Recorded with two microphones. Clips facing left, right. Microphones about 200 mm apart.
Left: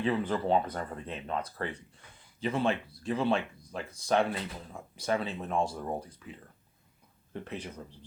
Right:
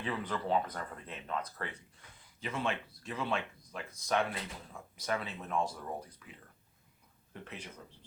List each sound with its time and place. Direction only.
0.0 s speech: 30° left (ahead or behind)
7.4 s speech: 35° left (ahead or behind)